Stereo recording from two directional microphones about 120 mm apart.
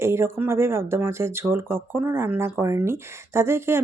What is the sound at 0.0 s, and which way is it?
Speech, 20° right (ahead or behind).